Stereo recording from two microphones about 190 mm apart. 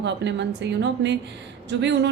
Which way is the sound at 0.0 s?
65° right (ahead or behind).